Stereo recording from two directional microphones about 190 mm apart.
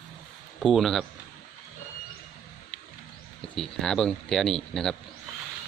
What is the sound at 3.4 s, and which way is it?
Speech, centre (ahead or behind).